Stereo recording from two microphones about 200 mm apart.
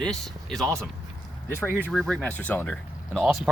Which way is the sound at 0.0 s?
Centre (ahead or behind).